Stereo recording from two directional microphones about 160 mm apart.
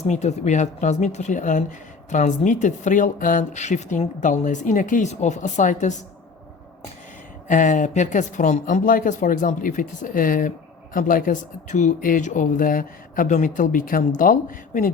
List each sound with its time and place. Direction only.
0.0 s speech: 45° left (ahead or behind)
7.4 s speech: 55° left (ahead or behind)